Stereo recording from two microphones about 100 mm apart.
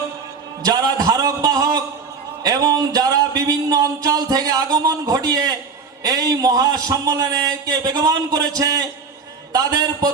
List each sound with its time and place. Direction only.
0.6 s speech: 40° right (ahead or behind)